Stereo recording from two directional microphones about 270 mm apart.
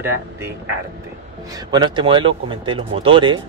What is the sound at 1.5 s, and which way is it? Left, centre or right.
Speech, centre.